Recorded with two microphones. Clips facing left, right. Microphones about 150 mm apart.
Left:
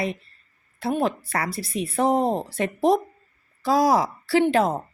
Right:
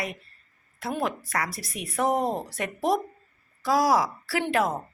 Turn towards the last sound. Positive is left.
turn(degrees=30)  # may be behind; listen again after turning